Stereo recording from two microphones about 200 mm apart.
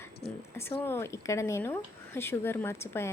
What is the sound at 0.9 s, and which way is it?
Speech, 15° left (ahead or behind).